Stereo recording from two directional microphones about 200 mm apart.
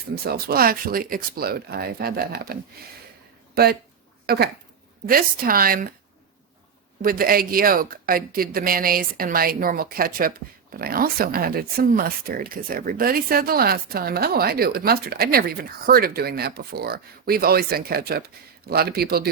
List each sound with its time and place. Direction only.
0.3 s speech: 50° right (ahead or behind)
7.0 s speech: 45° right (ahead or behind)